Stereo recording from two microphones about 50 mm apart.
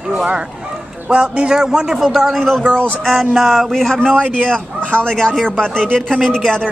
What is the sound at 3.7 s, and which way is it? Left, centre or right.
Speech, centre.